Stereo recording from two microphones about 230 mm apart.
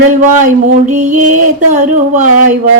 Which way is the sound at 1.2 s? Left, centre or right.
Right.